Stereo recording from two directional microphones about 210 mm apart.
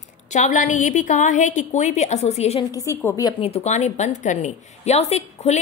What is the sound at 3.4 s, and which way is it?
A woman's voice, 30° left (ahead or behind).